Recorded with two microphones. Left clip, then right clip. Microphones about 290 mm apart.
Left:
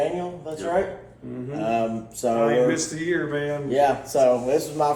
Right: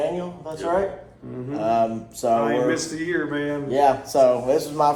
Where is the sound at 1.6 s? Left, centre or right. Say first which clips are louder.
Right 3 dB; centre.